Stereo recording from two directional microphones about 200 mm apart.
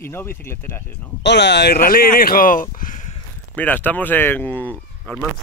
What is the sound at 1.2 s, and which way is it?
Speech, 60° left (ahead or behind).